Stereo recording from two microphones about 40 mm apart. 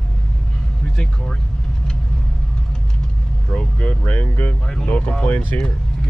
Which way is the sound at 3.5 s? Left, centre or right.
Left.